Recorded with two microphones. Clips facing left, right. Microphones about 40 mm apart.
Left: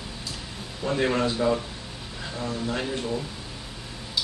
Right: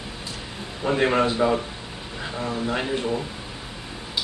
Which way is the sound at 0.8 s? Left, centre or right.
Right.